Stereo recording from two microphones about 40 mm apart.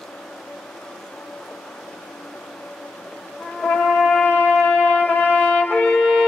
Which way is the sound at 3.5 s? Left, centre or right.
Centre.